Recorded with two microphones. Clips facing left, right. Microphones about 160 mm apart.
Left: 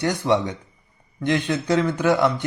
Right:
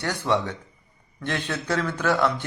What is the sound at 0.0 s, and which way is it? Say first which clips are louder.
A man's voice: left 4 dB; 15° left (ahead or behind).